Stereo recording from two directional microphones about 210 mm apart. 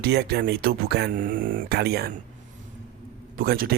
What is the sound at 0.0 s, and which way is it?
Speech, 50° right (ahead or behind).